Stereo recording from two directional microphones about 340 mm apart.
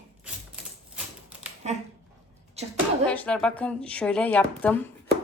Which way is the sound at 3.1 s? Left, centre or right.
Centre.